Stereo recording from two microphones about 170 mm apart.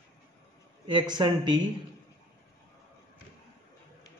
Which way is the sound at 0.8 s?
25° right (ahead or behind).